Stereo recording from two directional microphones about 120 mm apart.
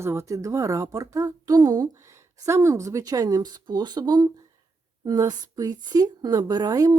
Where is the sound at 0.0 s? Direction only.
25° right (ahead or behind).